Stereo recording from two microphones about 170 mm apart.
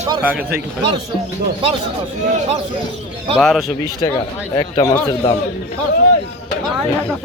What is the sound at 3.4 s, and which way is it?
Speech, centre (ahead or behind).